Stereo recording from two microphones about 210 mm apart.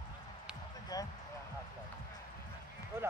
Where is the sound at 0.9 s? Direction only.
15° left (ahead or behind).